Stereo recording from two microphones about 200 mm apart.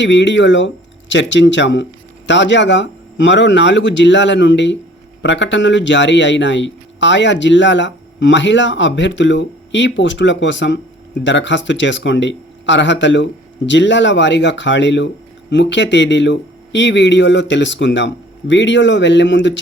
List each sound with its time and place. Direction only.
0.0 s speech: 65° left (ahead or behind)